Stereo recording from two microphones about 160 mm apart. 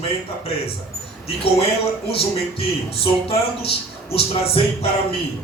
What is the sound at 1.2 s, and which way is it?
Speech, 35° left (ahead or behind).